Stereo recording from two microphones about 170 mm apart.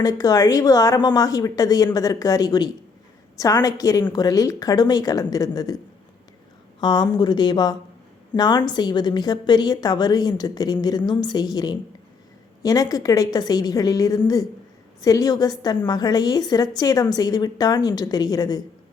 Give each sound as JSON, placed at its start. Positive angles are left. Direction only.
{"t": 0.0, "sound": "a woman's voice", "side_deg": 20}